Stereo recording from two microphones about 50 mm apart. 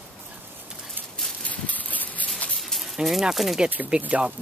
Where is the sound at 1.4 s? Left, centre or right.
Left.